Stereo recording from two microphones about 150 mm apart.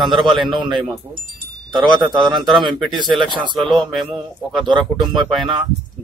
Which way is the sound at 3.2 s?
30° right (ahead or behind).